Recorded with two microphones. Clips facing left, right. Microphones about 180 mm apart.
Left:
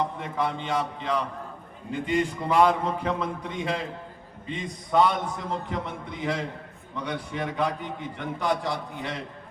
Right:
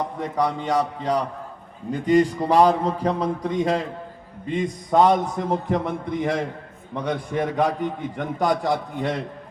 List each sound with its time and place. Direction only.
0.2 s a man's voice: 40° right (ahead or behind)